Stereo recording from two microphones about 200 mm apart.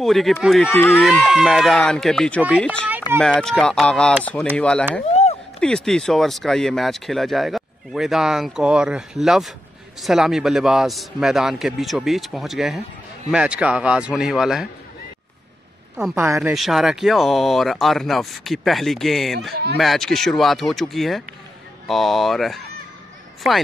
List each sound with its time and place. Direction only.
0.0 s speech: centre (ahead or behind)
0.7 s speech: 10° left (ahead or behind)
16.3 s speech: centre (ahead or behind)
19.5 s speech: 55° right (ahead or behind)
19.8 s speech: centre (ahead or behind)